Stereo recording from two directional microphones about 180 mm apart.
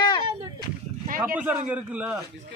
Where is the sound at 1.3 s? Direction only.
10° right (ahead or behind).